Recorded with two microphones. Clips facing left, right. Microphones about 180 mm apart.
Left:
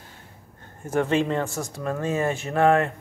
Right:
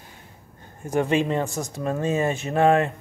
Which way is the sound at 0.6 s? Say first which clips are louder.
Right 1 dB; 15° right (ahead or behind).